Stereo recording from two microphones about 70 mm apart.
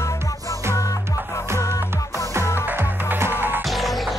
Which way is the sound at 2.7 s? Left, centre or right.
Right.